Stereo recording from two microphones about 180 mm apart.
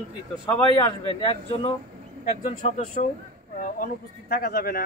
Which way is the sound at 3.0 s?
50° left (ahead or behind).